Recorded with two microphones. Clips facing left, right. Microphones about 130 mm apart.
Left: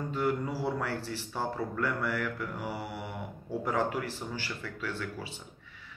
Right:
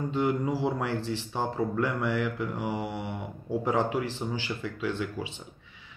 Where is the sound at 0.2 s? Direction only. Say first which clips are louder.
Right 4 dB; 15° right (ahead or behind).